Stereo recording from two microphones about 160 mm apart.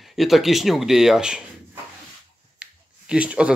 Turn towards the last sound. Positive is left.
turn(degrees=-5)  # may be behind; listen again after turning